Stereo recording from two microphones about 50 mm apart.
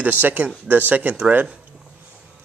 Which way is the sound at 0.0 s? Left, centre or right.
Right.